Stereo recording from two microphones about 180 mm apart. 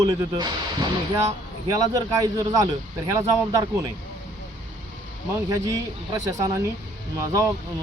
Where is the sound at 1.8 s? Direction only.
20° right (ahead or behind).